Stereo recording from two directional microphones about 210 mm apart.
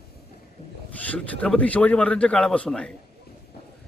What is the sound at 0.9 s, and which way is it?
Speech, 5° left (ahead or behind).